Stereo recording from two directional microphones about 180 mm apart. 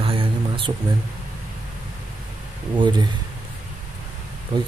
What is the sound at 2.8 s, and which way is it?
Speech, 25° right (ahead or behind).